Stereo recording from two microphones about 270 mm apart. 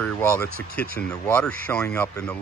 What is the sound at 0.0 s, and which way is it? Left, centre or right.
A man's voice, centre.